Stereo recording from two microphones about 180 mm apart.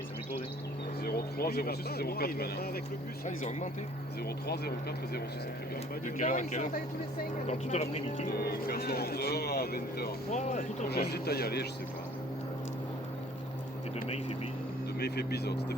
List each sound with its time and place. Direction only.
1.0 s speech: 60° left (ahead or behind)
3.2 s speech: 40° left (ahead or behind)
4.4 s speech: 60° left (ahead or behind)
6.1 s speech: 45° left (ahead or behind)
7.4 s speech: 35° left (ahead or behind)
8.3 s speech: 60° left (ahead or behind)
14.9 s speech: 60° left (ahead or behind)